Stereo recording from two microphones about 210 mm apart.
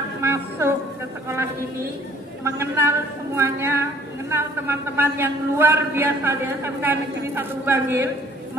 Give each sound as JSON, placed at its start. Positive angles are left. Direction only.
{"t": 0.2, "sound": "music", "side_deg": -10}
{"t": 1.3, "sound": "a sound", "side_deg": -10}
{"t": 2.4, "sound": "a man's voice", "side_deg": -10}